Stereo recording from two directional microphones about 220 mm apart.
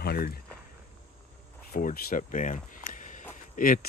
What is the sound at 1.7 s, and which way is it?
Speech, 40° left (ahead or behind).